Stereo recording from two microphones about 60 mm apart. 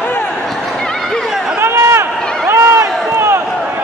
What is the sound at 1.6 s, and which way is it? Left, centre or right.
Run, right.